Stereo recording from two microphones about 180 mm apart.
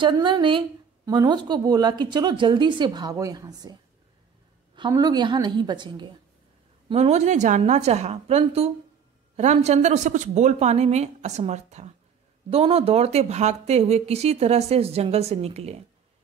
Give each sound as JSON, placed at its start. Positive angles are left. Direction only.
{"t": 0.0, "sound": "a woman's voice", "side_deg": -25}
{"t": 4.7, "sound": "a woman's voice", "side_deg": -25}
{"t": 6.9, "sound": "speech", "side_deg": -35}